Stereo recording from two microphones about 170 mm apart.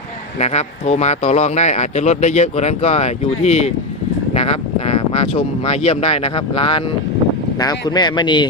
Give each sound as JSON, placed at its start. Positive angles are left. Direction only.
{"t": 0.3, "sound": "speech", "side_deg": 40}
{"t": 4.9, "sound": "speech", "side_deg": 35}